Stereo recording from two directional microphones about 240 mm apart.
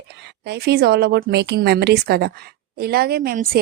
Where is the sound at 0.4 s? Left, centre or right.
Right.